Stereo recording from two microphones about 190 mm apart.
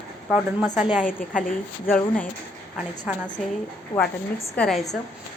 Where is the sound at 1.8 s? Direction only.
10° left (ahead or behind).